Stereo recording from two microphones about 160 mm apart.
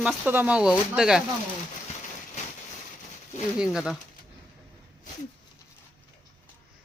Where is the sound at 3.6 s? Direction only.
5° right (ahead or behind).